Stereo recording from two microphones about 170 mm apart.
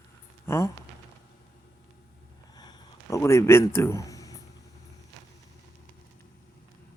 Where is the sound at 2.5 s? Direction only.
25° left (ahead or behind).